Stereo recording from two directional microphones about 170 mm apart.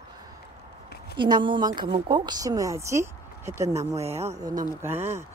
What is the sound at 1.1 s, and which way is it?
Speech, 30° right (ahead or behind).